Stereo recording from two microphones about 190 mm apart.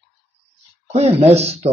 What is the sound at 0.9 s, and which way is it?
Speech, 30° right (ahead or behind).